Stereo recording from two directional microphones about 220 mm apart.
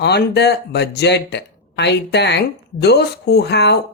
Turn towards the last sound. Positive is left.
turn(degrees=50)  # may be behind; listen again after turning